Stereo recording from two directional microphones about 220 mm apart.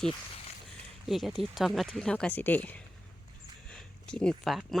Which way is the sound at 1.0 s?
Centre (ahead or behind).